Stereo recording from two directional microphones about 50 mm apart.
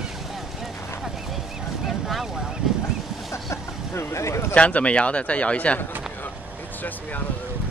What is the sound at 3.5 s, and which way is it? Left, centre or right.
Vehicle, left.